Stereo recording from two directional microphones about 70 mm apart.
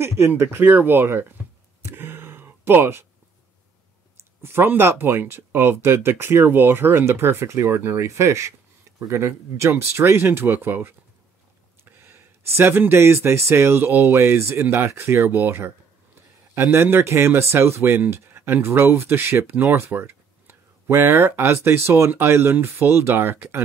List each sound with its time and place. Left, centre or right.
0.0 s speech: right
0.7 s speech: right
1.8 s a sound: right
4.4 s speech: right